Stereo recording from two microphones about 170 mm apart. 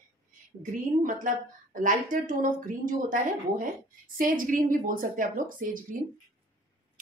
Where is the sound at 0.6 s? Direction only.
50° right (ahead or behind).